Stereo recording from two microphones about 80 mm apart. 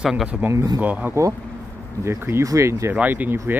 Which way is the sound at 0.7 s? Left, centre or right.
Centre.